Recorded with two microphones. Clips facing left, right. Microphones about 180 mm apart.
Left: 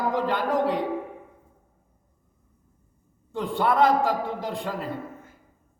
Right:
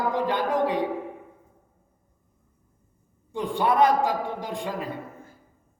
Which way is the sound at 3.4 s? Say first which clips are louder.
Even; 15° right (ahead or behind).